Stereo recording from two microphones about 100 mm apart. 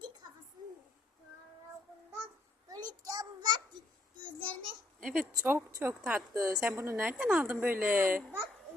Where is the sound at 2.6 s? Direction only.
40° right (ahead or behind).